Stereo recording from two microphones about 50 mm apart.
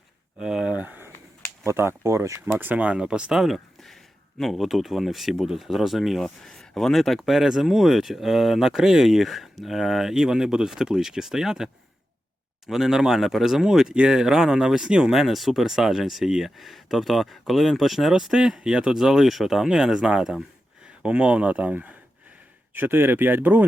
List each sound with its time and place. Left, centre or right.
0.3 s a sound: centre
0.7 s a sound: right
1.6 s speech: right
2.6 s speech: right
3.3 s speech: centre
20.8 s speech: right
22.7 s speech: right